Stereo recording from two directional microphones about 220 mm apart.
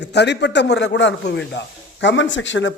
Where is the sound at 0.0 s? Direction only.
50° left (ahead or behind).